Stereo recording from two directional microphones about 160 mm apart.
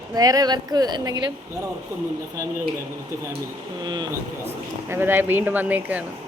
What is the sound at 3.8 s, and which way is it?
Speech, 25° right (ahead or behind).